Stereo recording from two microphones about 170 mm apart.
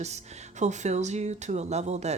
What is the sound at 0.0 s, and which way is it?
Speech, 40° right (ahead or behind).